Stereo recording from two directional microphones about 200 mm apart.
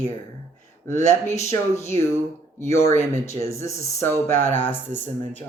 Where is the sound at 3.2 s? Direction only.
15° left (ahead or behind).